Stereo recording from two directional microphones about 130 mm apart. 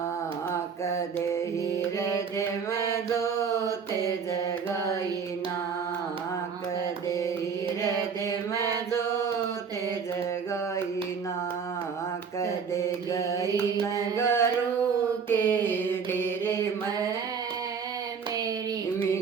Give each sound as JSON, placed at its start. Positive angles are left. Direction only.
{"t": 0.5, "sound": "mantra", "side_deg": 20}
{"t": 2.0, "sound": "music", "side_deg": 20}
{"t": 2.7, "sound": "mantra", "side_deg": 20}
{"t": 7.8, "sound": "chant", "side_deg": 25}
{"t": 8.9, "sound": "music", "side_deg": 20}
{"t": 12.4, "sound": "mantra", "side_deg": 20}
{"t": 14.2, "sound": "a sound", "side_deg": 20}
{"t": 15.3, "sound": "mantra", "side_deg": 15}